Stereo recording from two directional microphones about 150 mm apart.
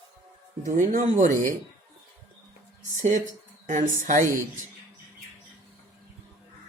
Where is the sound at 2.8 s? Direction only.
55° right (ahead or behind).